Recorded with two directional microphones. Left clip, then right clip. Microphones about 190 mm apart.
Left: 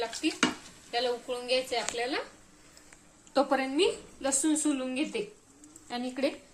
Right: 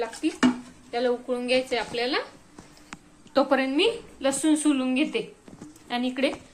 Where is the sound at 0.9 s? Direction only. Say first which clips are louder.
Right 5 dB; centre (ahead or behind).